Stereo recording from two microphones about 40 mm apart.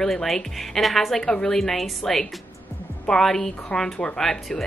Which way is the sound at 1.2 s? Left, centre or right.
Centre.